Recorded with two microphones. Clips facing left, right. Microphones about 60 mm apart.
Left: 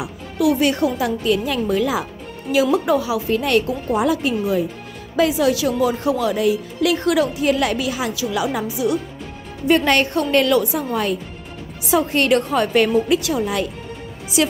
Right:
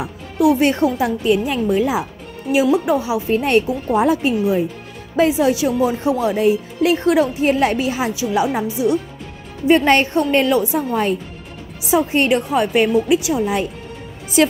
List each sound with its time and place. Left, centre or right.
0.0 s a woman's voice: right